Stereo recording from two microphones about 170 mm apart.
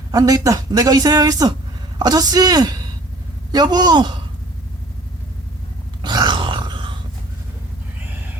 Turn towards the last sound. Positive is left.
turn(degrees=-25)  # may be behind; listen again after turning